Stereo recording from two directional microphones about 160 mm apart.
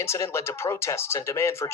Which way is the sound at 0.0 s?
15° left (ahead or behind).